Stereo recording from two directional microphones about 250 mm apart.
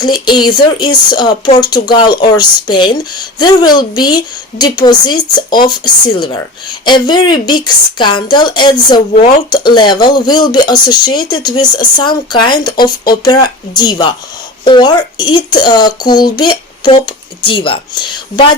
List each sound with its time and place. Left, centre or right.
0.0 s speech: centre